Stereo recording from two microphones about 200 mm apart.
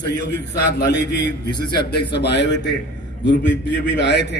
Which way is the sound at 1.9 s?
55° left (ahead or behind).